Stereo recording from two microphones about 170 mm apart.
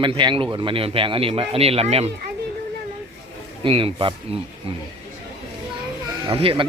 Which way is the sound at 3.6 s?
30° right (ahead or behind).